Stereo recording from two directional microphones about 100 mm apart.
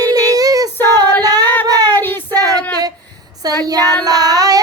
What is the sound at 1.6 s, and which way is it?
Child singing, 40° right (ahead or behind).